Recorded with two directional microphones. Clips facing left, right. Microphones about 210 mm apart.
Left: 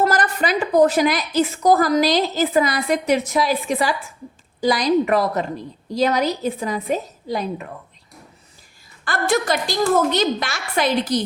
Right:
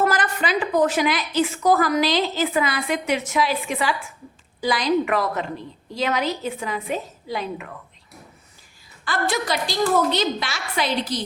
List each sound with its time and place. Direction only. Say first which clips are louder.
0.0 s a woman's voice: left 3 dB; 40° left (ahead or behind)
9.0 s a woman's voice: left 4 dB; 45° left (ahead or behind)